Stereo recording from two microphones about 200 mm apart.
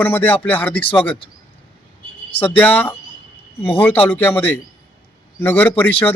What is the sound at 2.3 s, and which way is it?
Speech, 10° left (ahead or behind).